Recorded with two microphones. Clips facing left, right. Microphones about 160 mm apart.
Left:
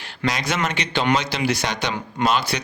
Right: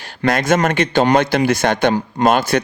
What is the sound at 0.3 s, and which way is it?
A man's voice, 50° right (ahead or behind).